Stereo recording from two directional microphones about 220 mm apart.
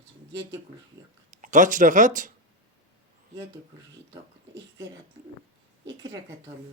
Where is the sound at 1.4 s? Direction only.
35° right (ahead or behind).